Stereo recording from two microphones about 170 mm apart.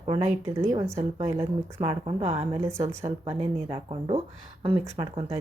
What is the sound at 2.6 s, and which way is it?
Speech, 15° right (ahead or behind).